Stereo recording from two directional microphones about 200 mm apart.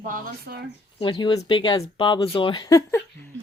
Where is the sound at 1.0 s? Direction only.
25° left (ahead or behind).